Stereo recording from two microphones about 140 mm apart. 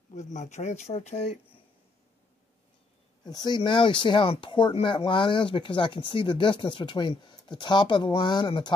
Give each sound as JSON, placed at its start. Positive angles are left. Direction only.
{"t": 0.1, "sound": "speech", "side_deg": 60}
{"t": 3.3, "sound": "speech", "side_deg": 30}